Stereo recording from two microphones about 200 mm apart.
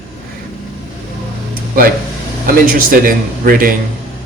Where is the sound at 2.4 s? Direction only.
45° right (ahead or behind).